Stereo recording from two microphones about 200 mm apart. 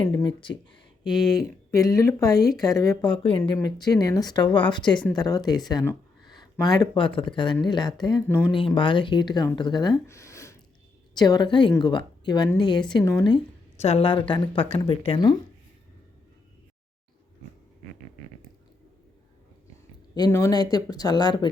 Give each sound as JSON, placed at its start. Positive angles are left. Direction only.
{"t": 0.0, "sound": "speech", "side_deg": 20}
{"t": 1.7, "sound": "speech", "side_deg": 15}
{"t": 3.1, "sound": "speech", "side_deg": 25}
{"t": 10.1, "sound": "a sound", "side_deg": 15}
{"t": 11.1, "sound": "speech", "side_deg": 20}
{"t": 20.1, "sound": "speech", "side_deg": 15}